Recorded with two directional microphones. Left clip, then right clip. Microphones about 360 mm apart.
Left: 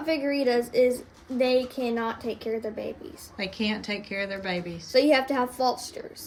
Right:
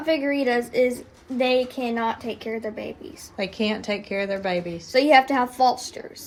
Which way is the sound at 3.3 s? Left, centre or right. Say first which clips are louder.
Right 4 dB; centre.